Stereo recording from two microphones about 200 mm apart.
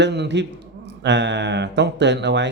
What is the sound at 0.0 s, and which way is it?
Speech, 60° right (ahead or behind).